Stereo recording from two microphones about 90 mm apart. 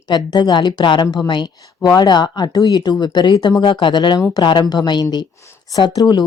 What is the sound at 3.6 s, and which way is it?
Speech, 65° left (ahead or behind).